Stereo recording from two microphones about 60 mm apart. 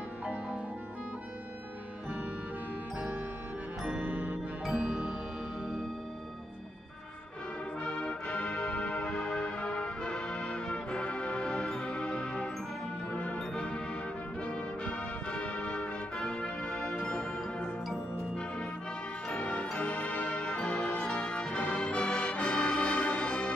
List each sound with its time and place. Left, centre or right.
4.0 s music: right
4.7 s music: centre
7.8 s music: centre
14.4 s brass instrument: centre
17.0 s music: centre
19.2 s music: centre